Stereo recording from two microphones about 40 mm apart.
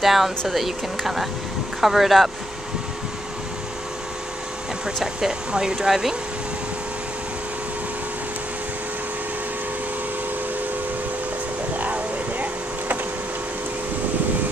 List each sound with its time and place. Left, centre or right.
0.0 s speech: centre
5.0 s speech: centre
5.9 s speech: centre
11.7 s a sound: right